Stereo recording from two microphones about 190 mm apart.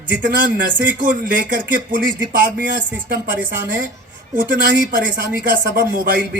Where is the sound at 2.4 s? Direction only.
45° right (ahead or behind).